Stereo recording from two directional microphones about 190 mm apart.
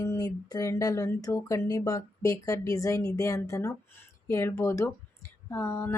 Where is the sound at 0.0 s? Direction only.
20° left (ahead or behind).